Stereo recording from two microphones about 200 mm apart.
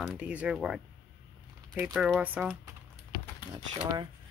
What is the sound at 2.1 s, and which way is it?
Speech, 5° right (ahead or behind).